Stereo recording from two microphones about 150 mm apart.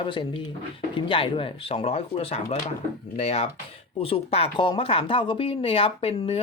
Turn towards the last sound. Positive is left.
turn(degrees=40)  # may be behind; listen again after turning